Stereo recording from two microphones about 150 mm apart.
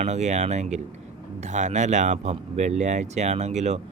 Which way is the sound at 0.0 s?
50° right (ahead or behind).